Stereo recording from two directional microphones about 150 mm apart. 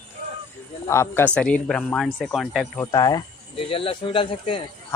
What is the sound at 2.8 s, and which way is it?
Speech, 25° left (ahead or behind).